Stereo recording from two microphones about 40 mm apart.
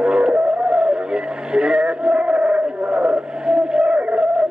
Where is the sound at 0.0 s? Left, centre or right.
Right.